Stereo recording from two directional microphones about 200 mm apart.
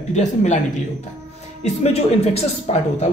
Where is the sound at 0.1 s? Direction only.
35° left (ahead or behind).